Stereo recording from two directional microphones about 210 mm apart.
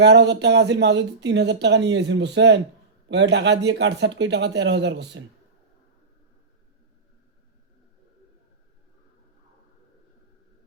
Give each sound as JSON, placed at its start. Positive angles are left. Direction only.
{"t": 0.0, "sound": "speech", "side_deg": -55}